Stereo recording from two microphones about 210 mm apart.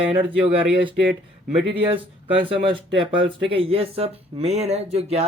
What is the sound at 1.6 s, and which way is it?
Speech, 25° right (ahead or behind).